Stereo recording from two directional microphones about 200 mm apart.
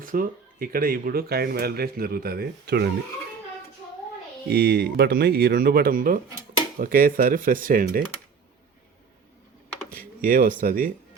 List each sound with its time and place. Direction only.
0.0 s speech: 45° right (ahead or behind)
4.4 s speech: 50° right (ahead or behind)
9.9 s a sound: 45° right (ahead or behind)
10.6 s speech: 45° right (ahead or behind)